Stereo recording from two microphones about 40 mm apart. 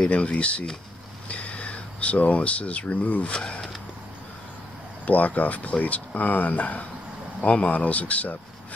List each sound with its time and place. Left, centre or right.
0.0 s speech: left
1.3 s a sound: left
3.0 s speech: left
3.3 s speech: left
5.0 s speech: left